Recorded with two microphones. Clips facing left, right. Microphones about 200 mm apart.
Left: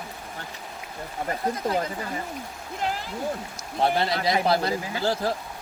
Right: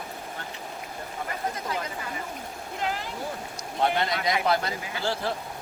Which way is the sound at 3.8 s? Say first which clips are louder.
Left 2 dB; 30° left (ahead or behind).